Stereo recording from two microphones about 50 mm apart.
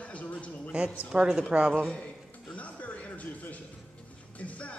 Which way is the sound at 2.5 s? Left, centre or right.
Left.